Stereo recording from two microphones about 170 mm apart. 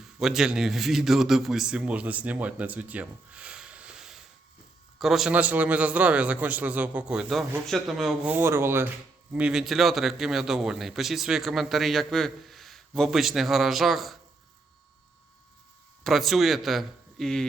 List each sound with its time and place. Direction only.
0.0 s a man's voice: centre (ahead or behind)
16.0 s a man's voice: centre (ahead or behind)